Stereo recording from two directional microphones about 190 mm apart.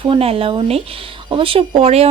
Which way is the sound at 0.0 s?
30° right (ahead or behind).